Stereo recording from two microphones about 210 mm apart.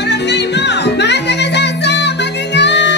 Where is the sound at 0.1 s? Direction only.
55° left (ahead or behind).